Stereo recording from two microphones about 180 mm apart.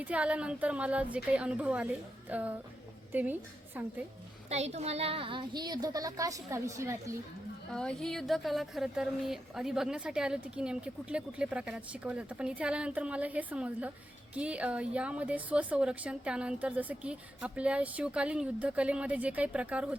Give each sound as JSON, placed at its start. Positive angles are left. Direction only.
{"t": 0.0, "sound": "a woman's voice", "side_deg": -5}
{"t": 4.4, "sound": "a woman's voice", "side_deg": -35}
{"t": 7.7, "sound": "a woman's voice", "side_deg": 5}